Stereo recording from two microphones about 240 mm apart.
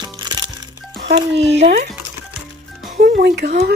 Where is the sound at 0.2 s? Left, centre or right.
Centre.